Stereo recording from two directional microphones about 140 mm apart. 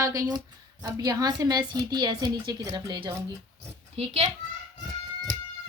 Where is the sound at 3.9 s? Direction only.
45° right (ahead or behind).